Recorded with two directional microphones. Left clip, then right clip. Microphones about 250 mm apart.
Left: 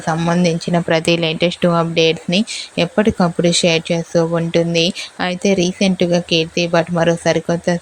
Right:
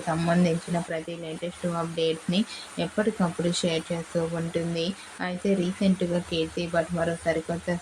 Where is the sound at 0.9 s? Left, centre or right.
Left.